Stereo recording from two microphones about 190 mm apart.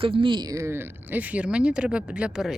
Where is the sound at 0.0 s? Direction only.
25° right (ahead or behind).